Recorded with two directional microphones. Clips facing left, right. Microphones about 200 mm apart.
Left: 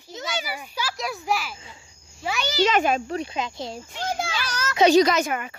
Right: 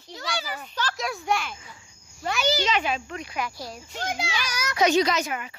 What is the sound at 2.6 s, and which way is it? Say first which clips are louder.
Speech: left 5 dB; 50° left (ahead or behind).